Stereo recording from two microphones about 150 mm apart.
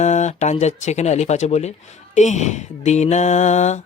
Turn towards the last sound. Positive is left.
turn(degrees=50)  # may be behind; listen again after turning